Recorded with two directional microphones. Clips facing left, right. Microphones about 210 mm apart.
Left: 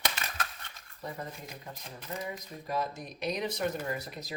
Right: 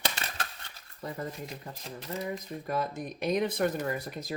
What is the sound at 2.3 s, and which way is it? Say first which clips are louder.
Speech: right 3 dB; 55° right (ahead or behind).